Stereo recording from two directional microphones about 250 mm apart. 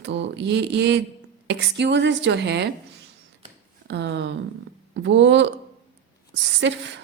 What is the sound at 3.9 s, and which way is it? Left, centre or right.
A woman's voice, right.